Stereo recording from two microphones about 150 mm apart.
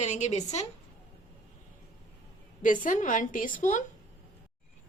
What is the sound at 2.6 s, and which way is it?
A woman's voice, 60° left (ahead or behind).